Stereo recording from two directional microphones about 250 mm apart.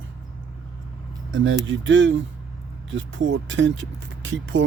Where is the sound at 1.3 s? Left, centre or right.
Right.